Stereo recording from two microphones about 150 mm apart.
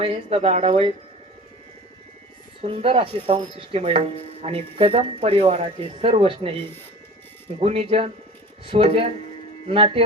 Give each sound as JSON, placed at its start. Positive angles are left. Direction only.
{"t": 0.0, "sound": "speech", "side_deg": -40}
{"t": 2.6, "sound": "speech", "side_deg": -35}
{"t": 7.6, "sound": "speech", "side_deg": -40}